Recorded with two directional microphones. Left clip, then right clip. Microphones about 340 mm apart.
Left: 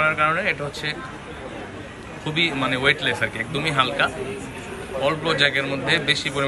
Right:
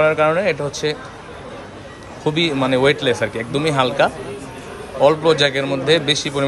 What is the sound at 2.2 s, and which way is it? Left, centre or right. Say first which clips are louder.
Speech: right 4 dB; centre.